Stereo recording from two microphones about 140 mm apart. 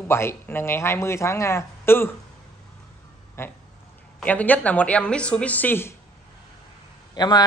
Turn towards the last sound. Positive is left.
turn(degrees=30)  # may be behind; listen again after turning